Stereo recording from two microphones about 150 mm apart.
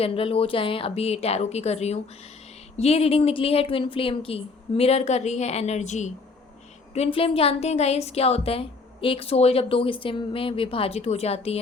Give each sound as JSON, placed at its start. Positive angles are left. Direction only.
{"t": 0.0, "sound": "a woman's voice", "side_deg": 40}
{"t": 6.9, "sound": "a woman's voice", "side_deg": 40}